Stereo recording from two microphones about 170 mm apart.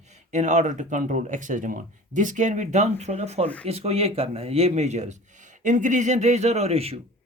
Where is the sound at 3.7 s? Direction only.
35° right (ahead or behind).